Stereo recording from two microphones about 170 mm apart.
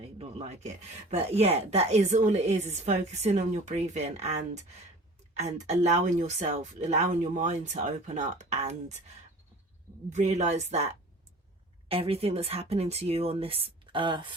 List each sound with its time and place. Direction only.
0.2 s speech: 40° right (ahead or behind)
10.1 s speech: 40° right (ahead or behind)